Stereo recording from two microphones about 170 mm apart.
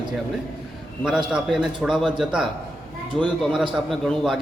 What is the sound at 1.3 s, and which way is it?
A man's voice, centre (ahead or behind).